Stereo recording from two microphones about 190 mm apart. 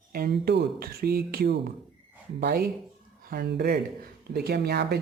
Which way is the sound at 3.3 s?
55° right (ahead or behind).